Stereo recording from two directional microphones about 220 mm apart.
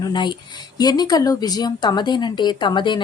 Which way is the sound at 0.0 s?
20° left (ahead or behind).